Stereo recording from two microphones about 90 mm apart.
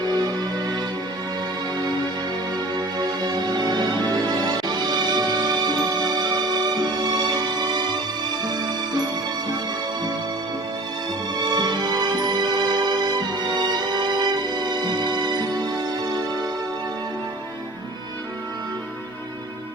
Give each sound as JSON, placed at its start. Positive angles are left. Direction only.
{"t": 0.0, "sound": "music", "side_deg": -50}
{"t": 2.7, "sound": "music", "side_deg": -50}
{"t": 11.3, "sound": "music", "side_deg": -50}